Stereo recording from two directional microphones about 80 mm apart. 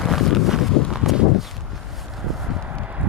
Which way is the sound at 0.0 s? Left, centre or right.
Centre.